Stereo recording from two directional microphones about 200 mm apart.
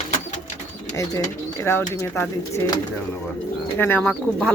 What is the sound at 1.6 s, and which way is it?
Speech, 15° left (ahead or behind).